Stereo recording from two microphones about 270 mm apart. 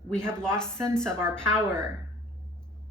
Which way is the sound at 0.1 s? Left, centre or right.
Centre.